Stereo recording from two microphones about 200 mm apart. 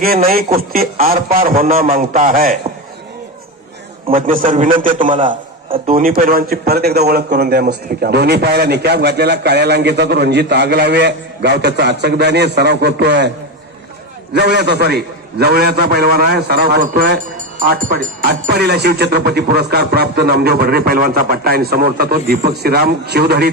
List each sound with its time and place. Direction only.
0.0 s music: 50° right (ahead or behind)
4.3 s a man's voice: 45° right (ahead or behind)
5.6 s a man's voice: 25° right (ahead or behind)
5.9 s a man's voice: 45° right (ahead or behind)
14.3 s music: 55° right (ahead or behind)